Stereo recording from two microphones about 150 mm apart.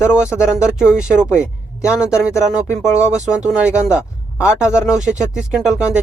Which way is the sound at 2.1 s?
20° left (ahead or behind).